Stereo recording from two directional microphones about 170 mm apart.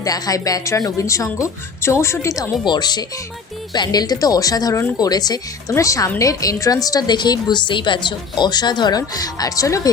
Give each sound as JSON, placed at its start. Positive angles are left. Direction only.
{"t": 0.0, "sound": "a woman's voice", "side_deg": 20}